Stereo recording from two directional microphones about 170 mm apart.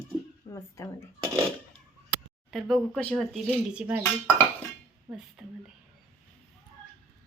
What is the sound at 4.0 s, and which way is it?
Speech, 15° left (ahead or behind).